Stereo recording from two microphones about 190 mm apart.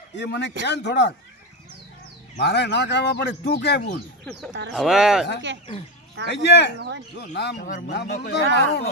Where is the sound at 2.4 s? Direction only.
65° left (ahead or behind).